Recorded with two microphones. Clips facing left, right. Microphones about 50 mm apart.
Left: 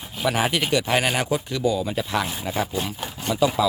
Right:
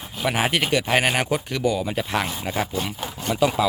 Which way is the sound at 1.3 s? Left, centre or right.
Right.